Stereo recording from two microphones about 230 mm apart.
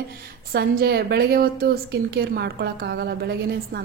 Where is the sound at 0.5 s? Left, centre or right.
Right.